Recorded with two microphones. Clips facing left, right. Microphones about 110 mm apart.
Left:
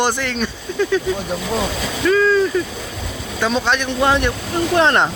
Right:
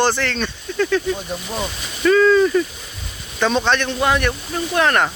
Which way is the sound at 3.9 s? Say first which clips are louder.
Left 2 dB; 25° left (ahead or behind).